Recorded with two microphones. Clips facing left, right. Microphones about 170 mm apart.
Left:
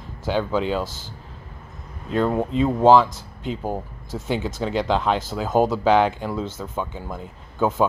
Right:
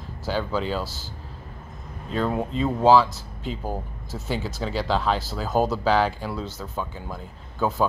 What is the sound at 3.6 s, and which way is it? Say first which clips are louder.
Speech: left 3 dB; 20° left (ahead or behind).